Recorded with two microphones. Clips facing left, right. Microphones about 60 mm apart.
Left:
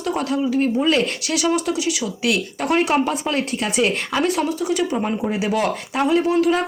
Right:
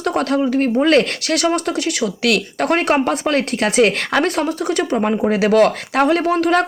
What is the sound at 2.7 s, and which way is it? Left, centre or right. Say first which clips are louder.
Speech: right 2 dB; right.